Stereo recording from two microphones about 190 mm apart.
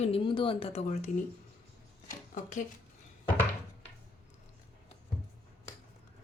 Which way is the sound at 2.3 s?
40° left (ahead or behind).